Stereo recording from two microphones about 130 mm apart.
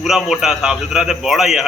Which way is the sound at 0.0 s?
5° right (ahead or behind).